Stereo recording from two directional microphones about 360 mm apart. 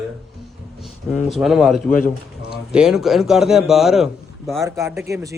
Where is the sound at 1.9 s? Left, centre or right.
Left.